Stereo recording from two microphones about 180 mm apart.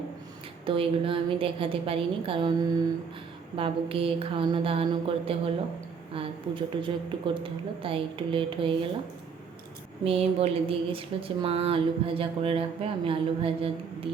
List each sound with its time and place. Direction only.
0.6 s a woman's voice: 30° right (ahead or behind)
10.0 s speech: 35° right (ahead or behind)